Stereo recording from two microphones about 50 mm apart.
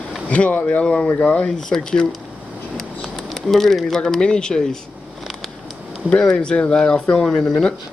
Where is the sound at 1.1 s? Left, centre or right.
Left.